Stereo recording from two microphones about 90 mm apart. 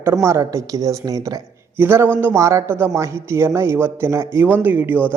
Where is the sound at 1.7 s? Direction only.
25° right (ahead or behind).